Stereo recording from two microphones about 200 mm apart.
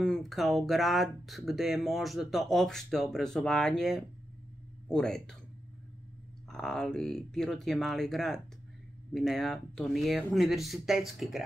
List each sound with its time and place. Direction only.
0.0 s speech: centre (ahead or behind)
6.5 s speech: centre (ahead or behind)